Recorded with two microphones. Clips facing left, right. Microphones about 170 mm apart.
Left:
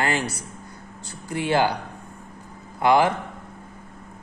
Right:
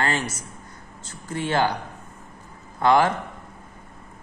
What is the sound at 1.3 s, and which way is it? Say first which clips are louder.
Speech: left 2 dB; 15° left (ahead or behind).